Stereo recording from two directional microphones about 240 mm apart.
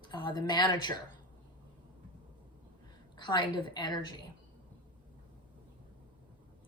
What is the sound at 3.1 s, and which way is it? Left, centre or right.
Speech, centre.